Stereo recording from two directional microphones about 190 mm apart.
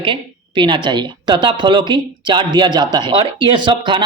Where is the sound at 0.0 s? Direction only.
25° right (ahead or behind).